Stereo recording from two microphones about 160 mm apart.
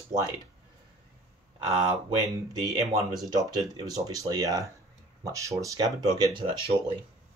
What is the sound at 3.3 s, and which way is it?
Speech, 25° right (ahead or behind).